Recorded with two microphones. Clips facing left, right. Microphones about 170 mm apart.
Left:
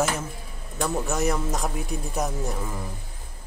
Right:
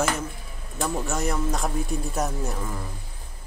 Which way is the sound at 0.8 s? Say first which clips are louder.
Left 2 dB; centre (ahead or behind).